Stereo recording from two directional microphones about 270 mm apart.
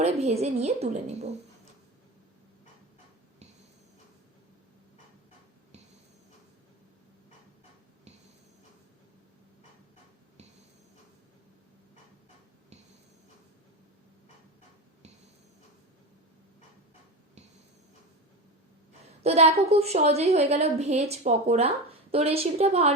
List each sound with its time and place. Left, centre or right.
0.0 s a woman's voice: right
19.2 s a woman's voice: right